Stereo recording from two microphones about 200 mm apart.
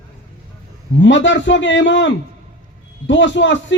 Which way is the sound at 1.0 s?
65° left (ahead or behind).